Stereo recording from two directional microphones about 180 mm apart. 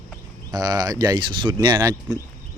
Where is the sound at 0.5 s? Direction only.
20° right (ahead or behind).